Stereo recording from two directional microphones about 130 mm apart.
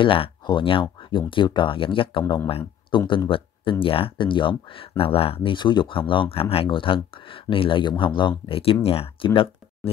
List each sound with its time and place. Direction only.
0.0 s speech: 40° left (ahead or behind)